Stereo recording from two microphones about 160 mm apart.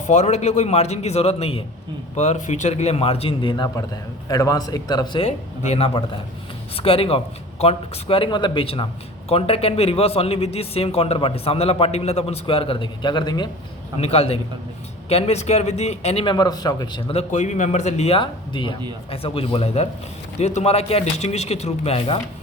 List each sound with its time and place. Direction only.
0.1 s a man's voice: 45° left (ahead or behind); by 5.2 s 25° left (ahead or behind)
5.2 s a man's voice: 40° left (ahead or behind)
14.0 s a man's voice: 40° left (ahead or behind)
16.3 s speech: 25° left (ahead or behind)
17.2 s a man's voice: 45° left (ahead or behind)